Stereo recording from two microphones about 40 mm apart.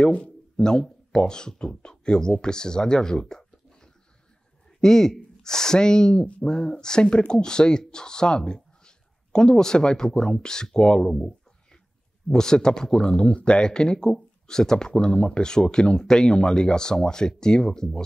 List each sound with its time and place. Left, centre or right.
0.6 s speech: centre
11.1 s a sound: centre
12.3 s speech: centre